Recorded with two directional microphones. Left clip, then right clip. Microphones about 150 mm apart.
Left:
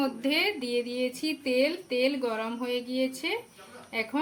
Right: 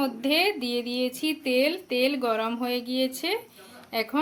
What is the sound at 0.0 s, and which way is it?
Speech, 45° right (ahead or behind).